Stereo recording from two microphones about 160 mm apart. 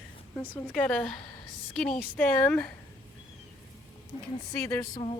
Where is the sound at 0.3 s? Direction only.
10° left (ahead or behind).